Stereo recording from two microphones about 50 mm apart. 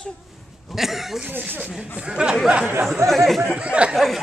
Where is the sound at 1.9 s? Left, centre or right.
Centre.